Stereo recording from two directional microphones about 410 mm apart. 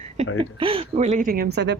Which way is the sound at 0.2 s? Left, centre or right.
Centre.